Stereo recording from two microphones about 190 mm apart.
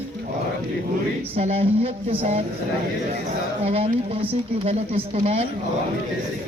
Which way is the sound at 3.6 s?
30° right (ahead or behind).